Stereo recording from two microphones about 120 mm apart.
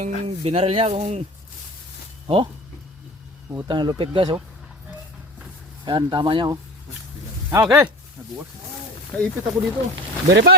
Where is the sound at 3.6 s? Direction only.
40° right (ahead or behind).